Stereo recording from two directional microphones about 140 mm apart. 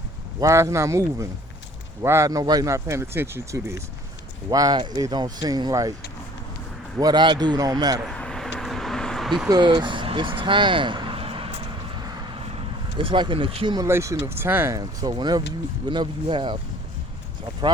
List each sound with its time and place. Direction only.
0.3 s speech: 20° right (ahead or behind)
7.0 s speech: 30° right (ahead or behind)
8.0 s vehicle: 5° left (ahead or behind)
9.5 s speech: 35° right (ahead or behind)
11.9 s vehicle: 30° right (ahead or behind)
13.0 s speech: 35° right (ahead or behind)
13.7 s speech: 20° right (ahead or behind)
14.8 s speech: 30° right (ahead or behind)